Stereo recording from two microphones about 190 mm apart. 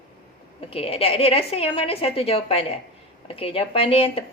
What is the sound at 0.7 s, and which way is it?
Speech, 30° left (ahead or behind).